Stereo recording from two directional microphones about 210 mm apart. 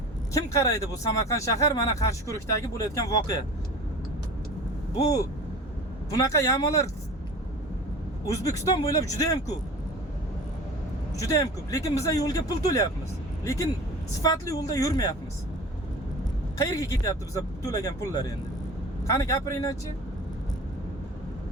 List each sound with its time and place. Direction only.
0.3 s speech: 15° left (ahead or behind)
6.1 s speech: 15° left (ahead or behind)
8.3 s speech: 15° left (ahead or behind)
11.2 s speech: 15° left (ahead or behind)
16.6 s speech: 15° left (ahead or behind)